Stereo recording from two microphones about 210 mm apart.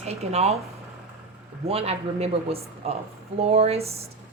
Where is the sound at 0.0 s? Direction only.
30° right (ahead or behind).